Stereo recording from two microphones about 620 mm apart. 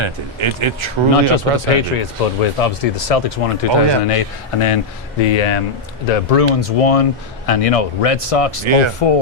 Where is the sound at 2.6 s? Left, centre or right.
Left.